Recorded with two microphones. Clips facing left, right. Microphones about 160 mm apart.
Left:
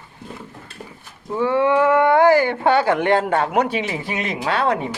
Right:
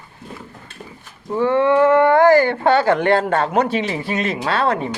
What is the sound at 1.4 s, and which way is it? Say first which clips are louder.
Speech: right 2 dB; 10° left (ahead or behind).